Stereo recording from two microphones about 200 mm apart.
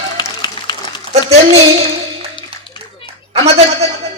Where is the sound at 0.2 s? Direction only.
20° left (ahead or behind).